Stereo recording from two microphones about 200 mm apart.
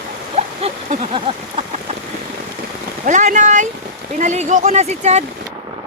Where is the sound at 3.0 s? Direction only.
35° right (ahead or behind).